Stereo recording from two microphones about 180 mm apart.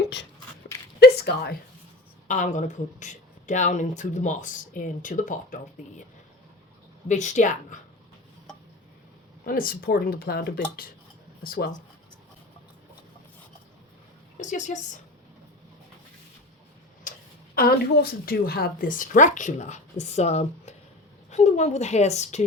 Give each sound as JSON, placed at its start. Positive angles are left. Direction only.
{"t": 0.9, "sound": "a sound", "side_deg": 70}
{"t": 2.2, "sound": "speech", "side_deg": 45}
{"t": 7.1, "sound": "speech", "side_deg": 40}
{"t": 9.5, "sound": "speech", "side_deg": 50}
{"t": 14.3, "sound": "speech", "side_deg": 45}
{"t": 17.0, "sound": "a woman's voice", "side_deg": 50}